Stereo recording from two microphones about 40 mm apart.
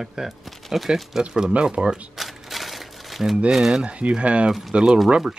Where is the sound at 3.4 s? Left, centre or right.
Centre.